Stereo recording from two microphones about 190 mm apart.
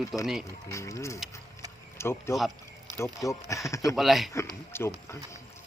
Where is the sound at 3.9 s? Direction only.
Centre (ahead or behind).